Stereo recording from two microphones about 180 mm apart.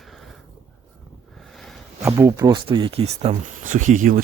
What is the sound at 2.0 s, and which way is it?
Speech, 15° right (ahead or behind).